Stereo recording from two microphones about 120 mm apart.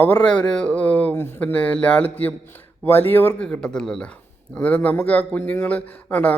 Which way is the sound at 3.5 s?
5° left (ahead or behind).